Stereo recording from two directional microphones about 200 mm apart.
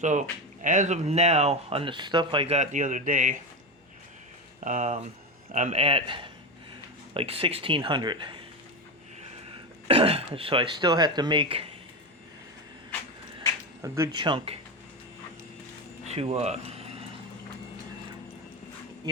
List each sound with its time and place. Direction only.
0.0 s speech: 35° right (ahead or behind)
4.6 s speech: 40° right (ahead or behind); by 8.4 s 25° right (ahead or behind)
9.8 s speech: 30° right (ahead or behind)
13.8 s speech: 15° right (ahead or behind)
14.2 s speech: 25° right (ahead or behind)
16.0 s a sound: 30° right (ahead or behind)